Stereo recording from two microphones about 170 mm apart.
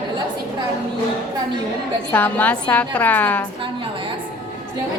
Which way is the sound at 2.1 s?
10° left (ahead or behind).